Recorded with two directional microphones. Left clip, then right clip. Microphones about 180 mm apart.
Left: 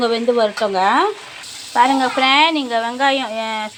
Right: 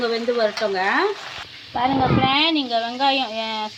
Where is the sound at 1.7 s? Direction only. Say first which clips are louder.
Left 5 dB; 25° left (ahead or behind).